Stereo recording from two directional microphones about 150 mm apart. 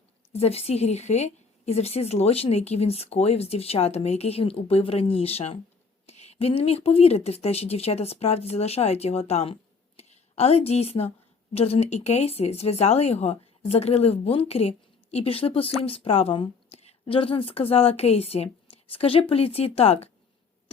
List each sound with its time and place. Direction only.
0.3 s a woman's voice: 45° left (ahead or behind)